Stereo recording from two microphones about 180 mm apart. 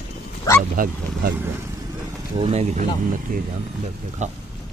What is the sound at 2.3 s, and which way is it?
Speech, 35° right (ahead or behind).